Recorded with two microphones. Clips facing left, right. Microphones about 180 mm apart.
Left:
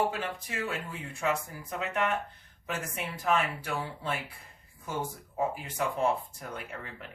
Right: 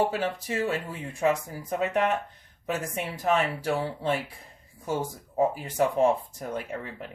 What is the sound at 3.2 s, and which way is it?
Speech, 40° right (ahead or behind).